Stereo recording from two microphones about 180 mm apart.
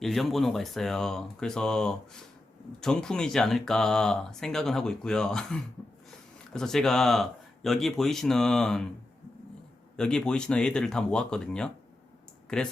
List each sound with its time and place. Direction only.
0.0 s speech: centre (ahead or behind)
10.0 s speech: 5° left (ahead or behind)